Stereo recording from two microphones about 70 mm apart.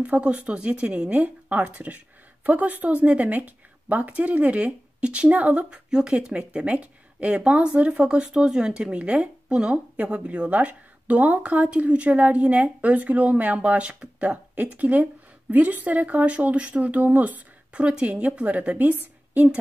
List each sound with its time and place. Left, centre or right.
0.0 s a woman's voice: centre